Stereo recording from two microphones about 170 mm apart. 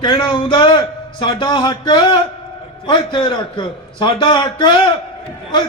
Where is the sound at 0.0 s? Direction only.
30° left (ahead or behind).